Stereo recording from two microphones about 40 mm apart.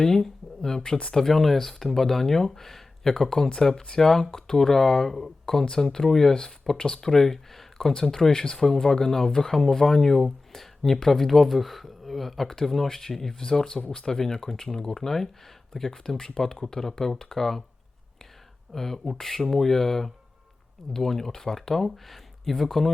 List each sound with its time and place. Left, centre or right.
0.0 s speech: centre
18.7 s speech: centre